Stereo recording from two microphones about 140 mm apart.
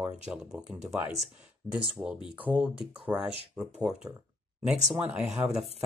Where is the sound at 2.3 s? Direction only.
10° right (ahead or behind).